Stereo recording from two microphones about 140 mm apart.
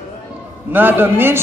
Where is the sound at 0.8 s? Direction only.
15° right (ahead or behind).